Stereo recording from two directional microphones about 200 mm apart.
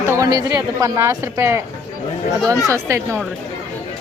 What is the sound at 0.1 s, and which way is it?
Speech, 15° right (ahead or behind).